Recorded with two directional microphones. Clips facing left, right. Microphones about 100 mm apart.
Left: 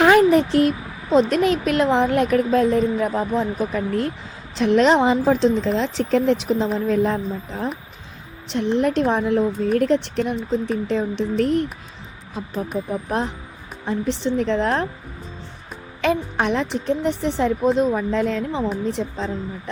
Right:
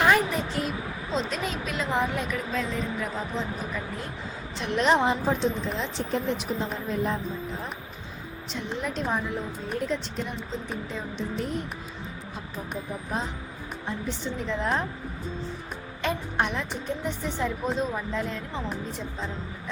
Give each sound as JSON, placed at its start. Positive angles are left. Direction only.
{"t": 0.0, "sound": "a sound", "side_deg": 65}
{"t": 1.1, "sound": "a woman's voice", "side_deg": 60}
{"t": 4.5, "sound": "a woman's voice", "side_deg": 90}
{"t": 8.4, "sound": "a woman's voice", "side_deg": 75}
{"t": 10.8, "sound": "a woman's voice", "side_deg": 80}
{"t": 12.9, "sound": "a woman's voice", "side_deg": 80}
{"t": 16.0, "sound": "a woman's voice", "side_deg": 90}